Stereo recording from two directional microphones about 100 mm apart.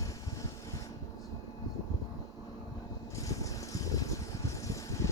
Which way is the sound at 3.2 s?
35° left (ahead or behind).